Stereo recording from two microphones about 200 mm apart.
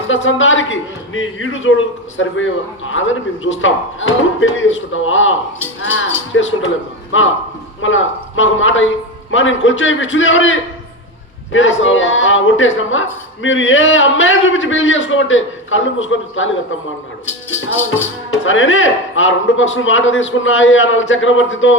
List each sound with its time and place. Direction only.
0.1 s speech: 75° left (ahead or behind)